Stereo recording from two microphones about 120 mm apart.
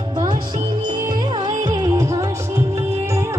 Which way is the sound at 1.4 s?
30° right (ahead or behind).